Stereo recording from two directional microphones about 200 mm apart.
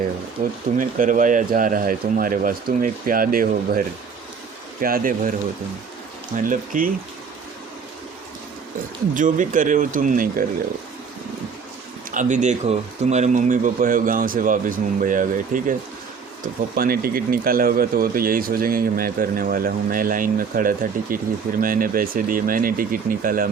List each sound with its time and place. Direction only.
0.4 s speech: 35° right (ahead or behind)
6.3 s speech: 45° right (ahead or behind)
9.1 s speech: 40° right (ahead or behind)
12.1 s speech: 35° right (ahead or behind)